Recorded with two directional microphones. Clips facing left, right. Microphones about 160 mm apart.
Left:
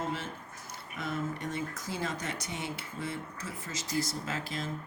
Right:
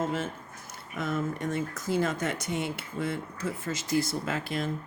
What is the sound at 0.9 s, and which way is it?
Speech, 50° right (ahead or behind).